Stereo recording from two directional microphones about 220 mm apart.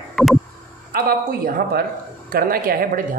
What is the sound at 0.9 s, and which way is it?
A woman's voice, 40° right (ahead or behind).